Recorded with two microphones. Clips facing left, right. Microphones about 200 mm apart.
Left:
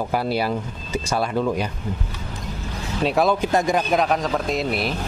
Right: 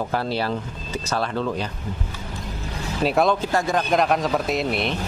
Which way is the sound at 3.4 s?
15° left (ahead or behind).